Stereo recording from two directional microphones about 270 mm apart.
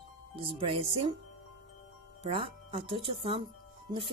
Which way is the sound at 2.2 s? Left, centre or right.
Right.